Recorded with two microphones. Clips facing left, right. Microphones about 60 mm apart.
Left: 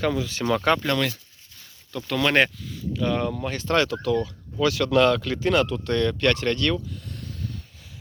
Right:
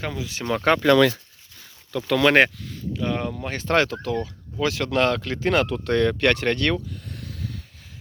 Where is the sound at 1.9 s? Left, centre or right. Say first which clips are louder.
Right 4 dB; right.